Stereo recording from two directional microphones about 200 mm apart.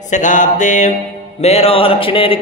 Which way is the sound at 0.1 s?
40° left (ahead or behind).